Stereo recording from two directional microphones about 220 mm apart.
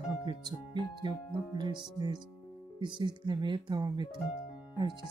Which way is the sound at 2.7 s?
20° right (ahead or behind).